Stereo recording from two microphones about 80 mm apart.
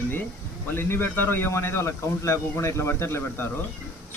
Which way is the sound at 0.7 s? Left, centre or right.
Left.